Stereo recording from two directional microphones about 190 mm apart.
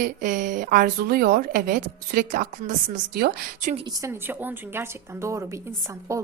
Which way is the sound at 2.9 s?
55° right (ahead or behind).